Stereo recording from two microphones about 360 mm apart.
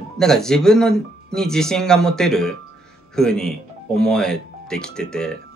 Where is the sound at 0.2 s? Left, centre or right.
Centre.